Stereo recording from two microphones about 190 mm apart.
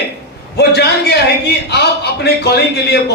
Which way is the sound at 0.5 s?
60° left (ahead or behind).